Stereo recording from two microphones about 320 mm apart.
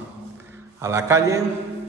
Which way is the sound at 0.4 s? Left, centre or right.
Centre.